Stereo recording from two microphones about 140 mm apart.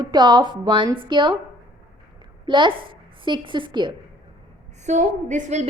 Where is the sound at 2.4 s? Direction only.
35° right (ahead or behind).